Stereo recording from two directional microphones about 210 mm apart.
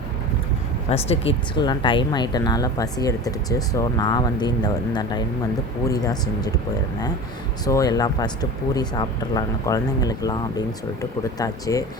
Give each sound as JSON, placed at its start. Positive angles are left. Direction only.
{"t": 0.9, "sound": "speech", "side_deg": 30}
{"t": 7.6, "sound": "speech", "side_deg": 15}